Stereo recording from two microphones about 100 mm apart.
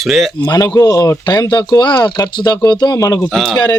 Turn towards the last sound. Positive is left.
turn(degrees=5)  # may be behind; listen again after turning